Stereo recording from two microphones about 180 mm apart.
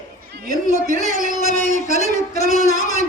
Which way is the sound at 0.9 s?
40° left (ahead or behind).